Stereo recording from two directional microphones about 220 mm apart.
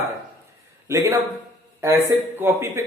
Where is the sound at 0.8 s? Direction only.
15° right (ahead or behind).